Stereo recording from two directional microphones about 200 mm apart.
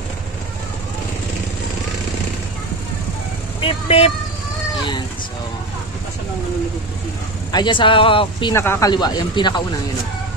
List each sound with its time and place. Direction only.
3.6 s speech: 30° left (ahead or behind)
7.5 s speech: 25° left (ahead or behind)
8.5 s speech: 15° left (ahead or behind)